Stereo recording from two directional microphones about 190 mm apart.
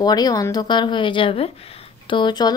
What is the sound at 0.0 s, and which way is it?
A woman's voice, 20° left (ahead or behind).